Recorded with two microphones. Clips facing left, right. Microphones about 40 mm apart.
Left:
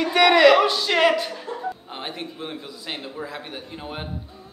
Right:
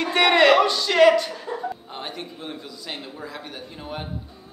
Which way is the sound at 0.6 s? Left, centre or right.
Centre.